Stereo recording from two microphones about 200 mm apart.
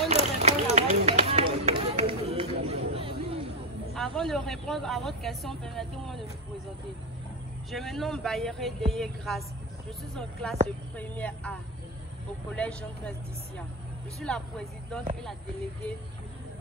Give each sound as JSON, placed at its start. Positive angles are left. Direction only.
{"t": 0.1, "sound": "run", "side_deg": -35}
{"t": 3.9, "sound": "speech", "side_deg": 0}
{"t": 7.7, "sound": "speech", "side_deg": 0}
{"t": 12.5, "sound": "speech", "side_deg": 5}
{"t": 14.2, "sound": "speech", "side_deg": 5}